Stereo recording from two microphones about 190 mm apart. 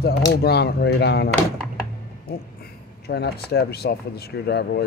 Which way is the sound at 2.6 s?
60° left (ahead or behind).